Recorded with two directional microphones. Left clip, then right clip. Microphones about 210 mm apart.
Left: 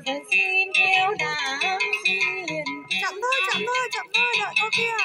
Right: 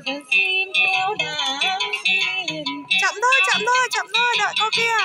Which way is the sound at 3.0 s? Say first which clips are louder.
Right 7 dB; 5° right (ahead or behind).